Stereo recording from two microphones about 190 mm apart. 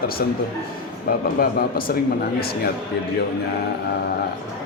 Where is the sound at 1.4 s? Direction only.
50° left (ahead or behind).